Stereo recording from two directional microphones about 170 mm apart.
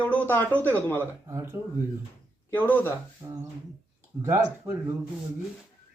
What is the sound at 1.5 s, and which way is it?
Speech, 15° right (ahead or behind).